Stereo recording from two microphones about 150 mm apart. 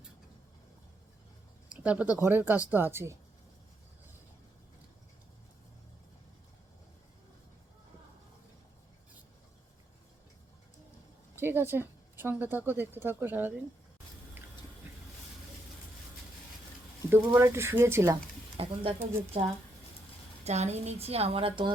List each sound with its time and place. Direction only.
1.7 s a sound: 10° right (ahead or behind)
2.1 s a woman's voice: 15° right (ahead or behind)
11.3 s a woman's voice: 15° right (ahead or behind)
17.1 s a woman's voice: 15° right (ahead or behind)
18.5 s speech: 40° right (ahead or behind)
20.4 s a woman's voice: 45° right (ahead or behind)